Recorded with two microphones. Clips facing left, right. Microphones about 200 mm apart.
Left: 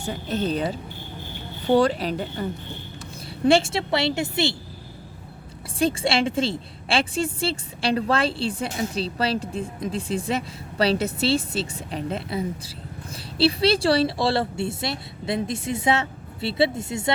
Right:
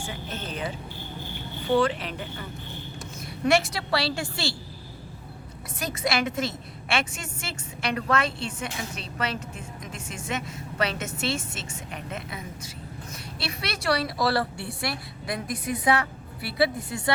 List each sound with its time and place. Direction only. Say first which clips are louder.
0.0 s a woman's voice: left 9 dB; 35° left (ahead or behind); by 4.5 s 20° left (ahead or behind)
5.8 s a woman's voice: left 6 dB; 30° left (ahead or behind)